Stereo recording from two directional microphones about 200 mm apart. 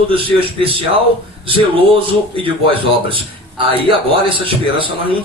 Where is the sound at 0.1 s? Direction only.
25° right (ahead or behind).